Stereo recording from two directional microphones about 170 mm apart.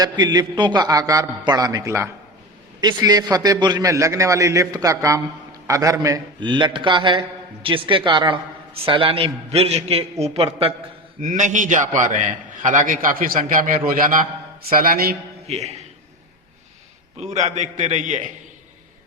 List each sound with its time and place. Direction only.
0.0 s a man's voice: 25° right (ahead or behind)
11.2 s a man's voice: 45° right (ahead or behind)
15.4 s speech: 40° right (ahead or behind)
17.2 s a man's voice: 40° right (ahead or behind)